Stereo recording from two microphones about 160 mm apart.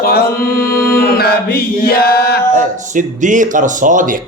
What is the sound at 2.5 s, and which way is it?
Music, 55° right (ahead or behind).